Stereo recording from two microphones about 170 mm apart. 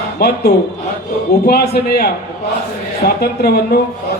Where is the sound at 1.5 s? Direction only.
70° left (ahead or behind).